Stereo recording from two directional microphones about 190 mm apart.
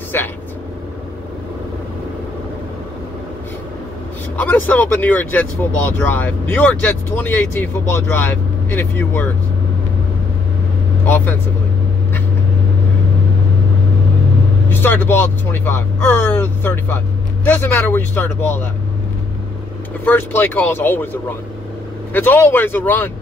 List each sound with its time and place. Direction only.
4.4 s speech: 10° left (ahead or behind)
11.1 s speech: 10° left (ahead or behind)
14.7 s speech: 10° left (ahead or behind)
20.1 s speech: 10° left (ahead or behind)